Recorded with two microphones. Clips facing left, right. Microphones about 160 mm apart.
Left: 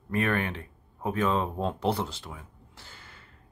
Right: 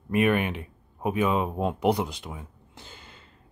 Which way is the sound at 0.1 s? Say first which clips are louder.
Right 5 dB; 15° right (ahead or behind).